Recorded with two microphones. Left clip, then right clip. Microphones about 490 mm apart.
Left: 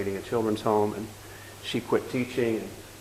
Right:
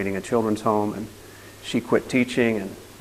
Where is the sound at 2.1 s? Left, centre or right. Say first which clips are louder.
Right 7 dB; right.